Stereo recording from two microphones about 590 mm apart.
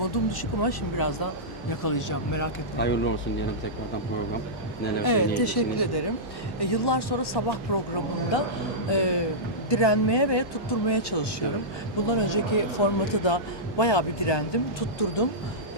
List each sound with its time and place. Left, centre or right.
0.0 s speech: left
2.7 s speech: centre
5.0 s a man's voice: left